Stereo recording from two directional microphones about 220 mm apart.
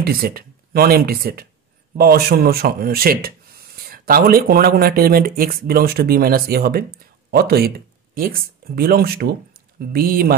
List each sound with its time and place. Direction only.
0.0 s speech: 45° right (ahead or behind)